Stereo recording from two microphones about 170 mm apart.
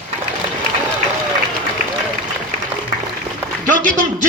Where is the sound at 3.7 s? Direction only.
50° right (ahead or behind).